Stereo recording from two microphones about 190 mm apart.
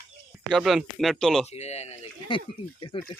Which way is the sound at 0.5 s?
Centre (ahead or behind).